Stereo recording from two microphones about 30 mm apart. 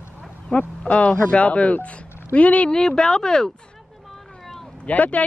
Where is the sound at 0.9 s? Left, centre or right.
Left.